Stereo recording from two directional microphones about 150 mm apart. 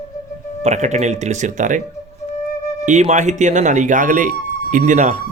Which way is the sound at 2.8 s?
50° right (ahead or behind).